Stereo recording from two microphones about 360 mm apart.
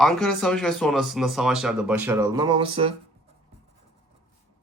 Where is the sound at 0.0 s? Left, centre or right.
Centre.